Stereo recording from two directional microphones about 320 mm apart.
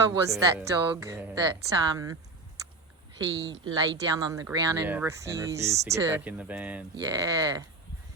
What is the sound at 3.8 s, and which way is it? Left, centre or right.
Speech, centre.